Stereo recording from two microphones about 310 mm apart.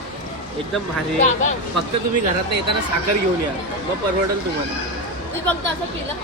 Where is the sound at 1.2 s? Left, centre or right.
Left.